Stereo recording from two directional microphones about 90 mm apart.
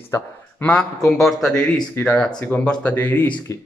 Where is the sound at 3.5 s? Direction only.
35° left (ahead or behind).